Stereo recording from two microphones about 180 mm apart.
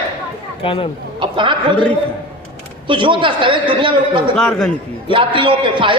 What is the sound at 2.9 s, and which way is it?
A woman's voice, 25° right (ahead or behind).